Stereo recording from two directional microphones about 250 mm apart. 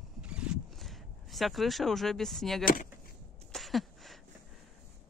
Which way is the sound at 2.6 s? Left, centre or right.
Left.